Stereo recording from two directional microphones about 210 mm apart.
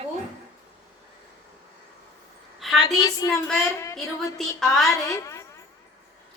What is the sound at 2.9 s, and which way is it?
Music, 15° left (ahead or behind).